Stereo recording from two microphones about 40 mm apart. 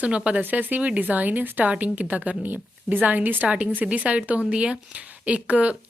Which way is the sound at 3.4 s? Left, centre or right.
Right.